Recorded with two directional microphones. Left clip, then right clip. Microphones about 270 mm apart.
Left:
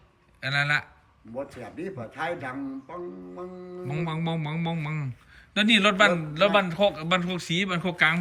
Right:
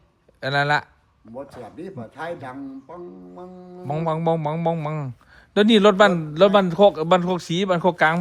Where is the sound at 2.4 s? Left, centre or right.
Right.